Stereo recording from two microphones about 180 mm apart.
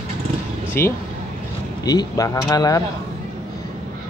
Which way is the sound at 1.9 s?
20° left (ahead or behind).